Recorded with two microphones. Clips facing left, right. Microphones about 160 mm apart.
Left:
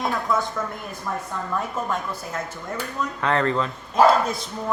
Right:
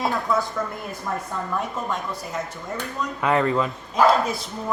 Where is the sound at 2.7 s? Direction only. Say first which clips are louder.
Even; 15° right (ahead or behind).